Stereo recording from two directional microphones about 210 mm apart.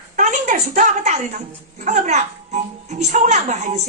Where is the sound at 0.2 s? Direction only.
35° right (ahead or behind).